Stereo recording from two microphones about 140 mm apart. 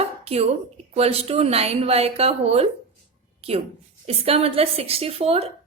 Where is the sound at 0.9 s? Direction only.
45° right (ahead or behind).